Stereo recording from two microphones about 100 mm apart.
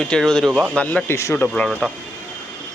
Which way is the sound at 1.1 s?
25° left (ahead or behind).